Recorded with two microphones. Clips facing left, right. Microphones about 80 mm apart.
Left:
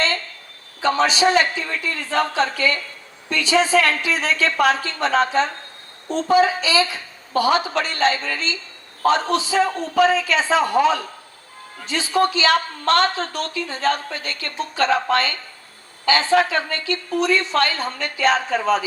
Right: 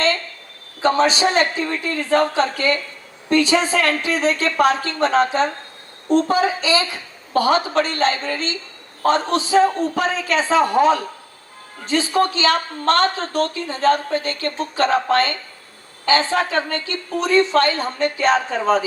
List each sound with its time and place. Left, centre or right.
0.8 s a woman's voice: right